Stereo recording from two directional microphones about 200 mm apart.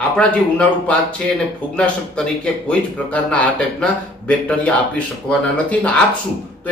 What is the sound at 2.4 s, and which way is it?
A man's voice, 5° left (ahead or behind).